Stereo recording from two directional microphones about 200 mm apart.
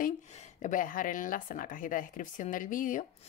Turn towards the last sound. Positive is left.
turn(degrees=40)  # may be behind; listen again after turning